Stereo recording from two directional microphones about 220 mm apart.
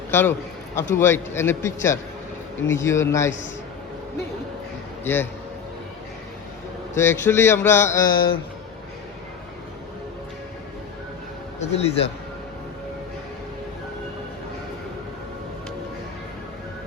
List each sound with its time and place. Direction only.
0.1 s a man's voice: 10° left (ahead or behind)
5.0 s a man's voice: 10° left (ahead or behind)
6.9 s a man's voice: 10° left (ahead or behind)
11.6 s a man's voice: 30° left (ahead or behind)